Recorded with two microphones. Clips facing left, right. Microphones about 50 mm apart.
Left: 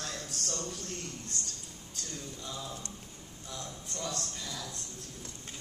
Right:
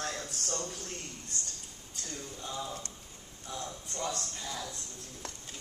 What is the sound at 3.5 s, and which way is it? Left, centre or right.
Speech, right.